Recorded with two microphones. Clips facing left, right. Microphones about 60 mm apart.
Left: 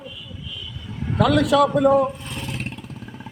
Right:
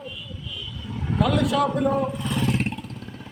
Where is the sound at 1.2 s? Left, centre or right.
Left.